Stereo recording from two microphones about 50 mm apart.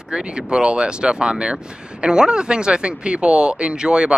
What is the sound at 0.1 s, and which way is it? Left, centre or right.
Speech, centre.